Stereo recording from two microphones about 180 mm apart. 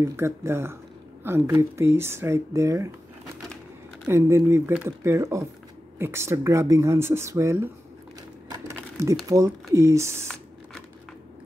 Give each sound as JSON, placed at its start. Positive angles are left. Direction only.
{"t": 0.0, "sound": "speech", "side_deg": -15}
{"t": 4.1, "sound": "speech", "side_deg": -15}
{"t": 8.5, "sound": "sewing machine", "side_deg": -15}
{"t": 9.3, "sound": "speech", "side_deg": -15}